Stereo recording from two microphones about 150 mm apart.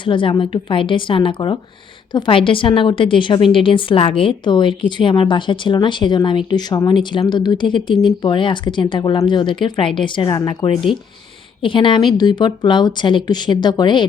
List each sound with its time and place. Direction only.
0.0 s a woman's voice: 35° left (ahead or behind)